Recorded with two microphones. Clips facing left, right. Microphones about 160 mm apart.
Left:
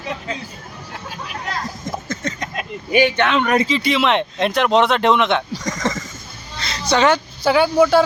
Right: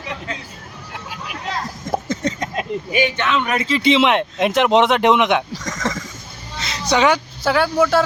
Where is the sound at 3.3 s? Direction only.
50° left (ahead or behind).